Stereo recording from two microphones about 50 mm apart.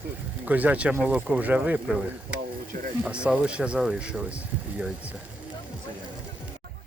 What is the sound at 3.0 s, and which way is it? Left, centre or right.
Speech, right.